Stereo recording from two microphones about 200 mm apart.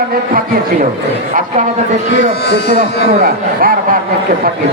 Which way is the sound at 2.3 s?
55° left (ahead or behind).